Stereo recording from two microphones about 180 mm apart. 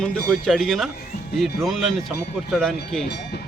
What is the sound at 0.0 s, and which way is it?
Speech, 5° left (ahead or behind).